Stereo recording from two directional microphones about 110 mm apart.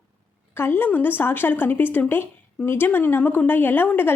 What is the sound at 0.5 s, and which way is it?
A woman's voice, 20° left (ahead or behind).